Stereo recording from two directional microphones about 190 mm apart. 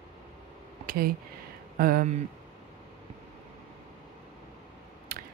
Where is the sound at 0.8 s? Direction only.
50° right (ahead or behind).